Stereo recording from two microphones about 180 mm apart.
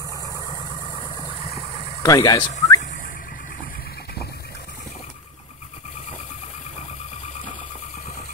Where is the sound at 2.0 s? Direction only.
20° left (ahead or behind).